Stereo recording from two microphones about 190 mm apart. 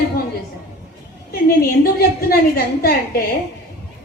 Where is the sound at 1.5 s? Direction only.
50° left (ahead or behind).